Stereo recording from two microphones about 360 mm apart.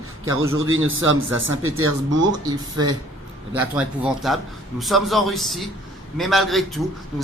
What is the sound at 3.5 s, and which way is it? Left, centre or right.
Speech, centre.